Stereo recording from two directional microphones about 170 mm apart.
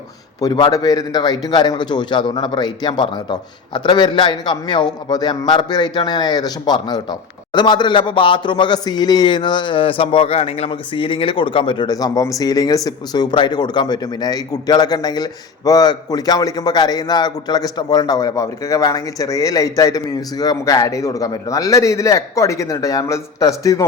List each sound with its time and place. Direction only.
0.3 s a man's voice: 25° left (ahead or behind)